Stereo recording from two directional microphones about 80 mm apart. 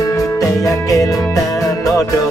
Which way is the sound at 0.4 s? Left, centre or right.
Left.